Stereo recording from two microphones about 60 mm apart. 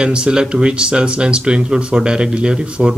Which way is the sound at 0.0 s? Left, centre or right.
Centre.